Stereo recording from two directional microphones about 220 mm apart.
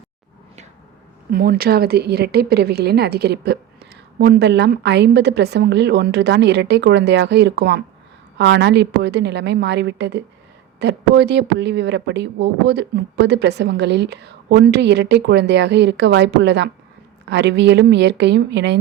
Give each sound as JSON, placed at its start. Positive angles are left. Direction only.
{"t": 1.3, "sound": "speech", "side_deg": -40}